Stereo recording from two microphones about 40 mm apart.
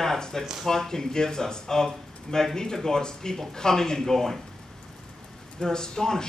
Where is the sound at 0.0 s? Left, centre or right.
Centre.